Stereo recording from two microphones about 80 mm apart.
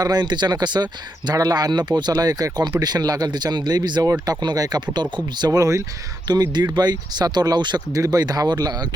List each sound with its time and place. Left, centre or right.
0.0 s speech: right
6.2 s speech: right
7.9 s speech: right